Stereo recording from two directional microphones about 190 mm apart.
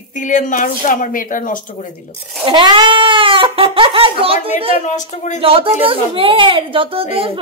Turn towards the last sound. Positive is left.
turn(degrees=-30)  # may be behind; listen again after turning